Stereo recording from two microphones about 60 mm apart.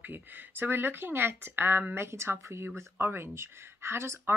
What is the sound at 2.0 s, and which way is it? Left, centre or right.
Speech, right.